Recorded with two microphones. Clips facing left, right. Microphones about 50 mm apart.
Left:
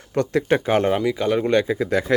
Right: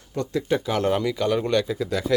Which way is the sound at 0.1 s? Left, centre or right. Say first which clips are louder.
Left 5 dB; left.